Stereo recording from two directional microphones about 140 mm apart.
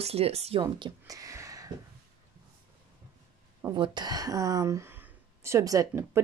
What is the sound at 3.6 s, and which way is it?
Speech, 30° right (ahead or behind).